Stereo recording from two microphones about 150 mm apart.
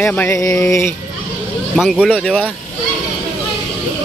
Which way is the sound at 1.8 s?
Centre (ahead or behind).